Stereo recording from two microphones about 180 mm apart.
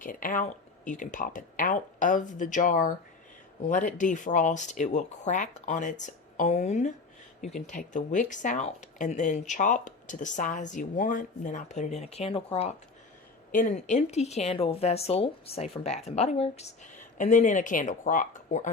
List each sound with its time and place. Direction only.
0.0 s speech: 50° left (ahead or behind); by 12.7 s 30° left (ahead or behind)
13.5 s speech: 45° left (ahead or behind)